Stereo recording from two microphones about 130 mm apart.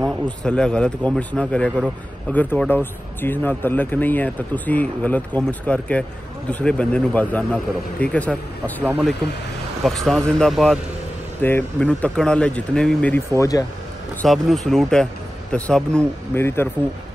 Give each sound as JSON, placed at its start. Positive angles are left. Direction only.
{"t": 0.4, "sound": "a man's voice", "side_deg": 5}
{"t": 13.3, "sound": "speech", "side_deg": 25}
{"t": 14.2, "sound": "a man's voice", "side_deg": 0}